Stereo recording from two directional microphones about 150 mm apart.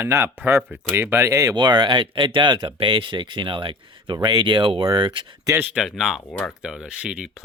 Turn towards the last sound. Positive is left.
turn(degrees=-5)  # may be behind; listen again after turning